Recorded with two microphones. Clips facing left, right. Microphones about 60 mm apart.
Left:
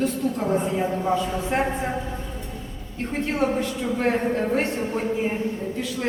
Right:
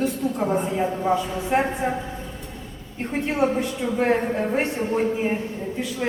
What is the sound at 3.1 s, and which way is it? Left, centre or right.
A woman's voice, centre.